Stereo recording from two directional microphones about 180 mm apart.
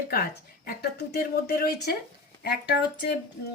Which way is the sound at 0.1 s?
60° left (ahead or behind).